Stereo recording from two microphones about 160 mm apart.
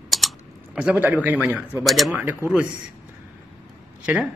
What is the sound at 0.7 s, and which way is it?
Speech, 10° right (ahead or behind).